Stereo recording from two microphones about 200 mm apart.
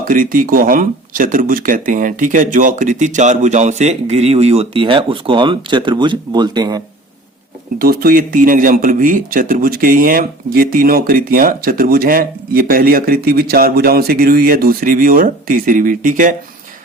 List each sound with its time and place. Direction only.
0.1 s speech: 45° right (ahead or behind); by 6.8 s 20° right (ahead or behind)
7.8 s speech: 45° right (ahead or behind)